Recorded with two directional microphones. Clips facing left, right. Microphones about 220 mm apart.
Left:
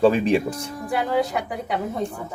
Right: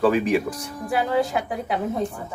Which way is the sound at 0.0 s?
25° left (ahead or behind).